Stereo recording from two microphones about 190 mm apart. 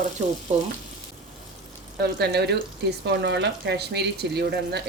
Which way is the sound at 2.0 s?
60° right (ahead or behind).